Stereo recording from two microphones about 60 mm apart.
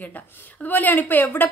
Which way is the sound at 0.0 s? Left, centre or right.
Left.